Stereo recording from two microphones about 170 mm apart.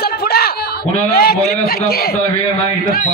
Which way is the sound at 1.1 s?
65° left (ahead or behind).